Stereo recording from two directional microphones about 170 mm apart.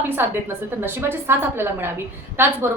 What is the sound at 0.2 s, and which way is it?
A woman's voice, 15° right (ahead or behind).